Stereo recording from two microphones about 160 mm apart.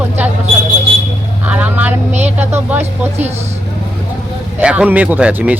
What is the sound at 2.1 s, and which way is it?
Vehicle, 45° right (ahead or behind).